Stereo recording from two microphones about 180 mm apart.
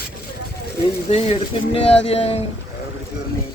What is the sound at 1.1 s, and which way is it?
Speech, 35° left (ahead or behind).